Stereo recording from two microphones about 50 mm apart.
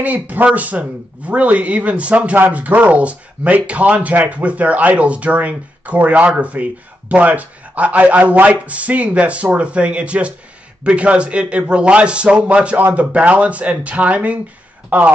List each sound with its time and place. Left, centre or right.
0.0 s speech: right